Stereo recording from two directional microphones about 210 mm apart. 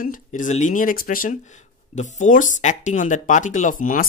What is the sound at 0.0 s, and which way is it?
Speech, 40° left (ahead or behind).